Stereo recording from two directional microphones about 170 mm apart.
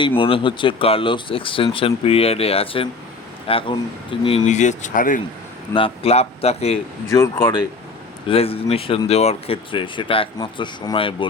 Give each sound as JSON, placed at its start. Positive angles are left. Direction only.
{"t": 0.2, "sound": "speech", "side_deg": 30}
{"t": 4.4, "sound": "speech", "side_deg": 45}
{"t": 5.7, "sound": "speech", "side_deg": 35}
{"t": 7.1, "sound": "speech", "side_deg": 15}
{"t": 8.3, "sound": "speech", "side_deg": 35}